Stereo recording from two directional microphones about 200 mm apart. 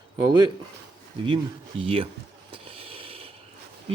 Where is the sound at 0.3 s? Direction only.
20° right (ahead or behind).